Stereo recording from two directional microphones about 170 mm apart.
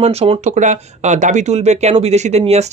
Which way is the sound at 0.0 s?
35° right (ahead or behind).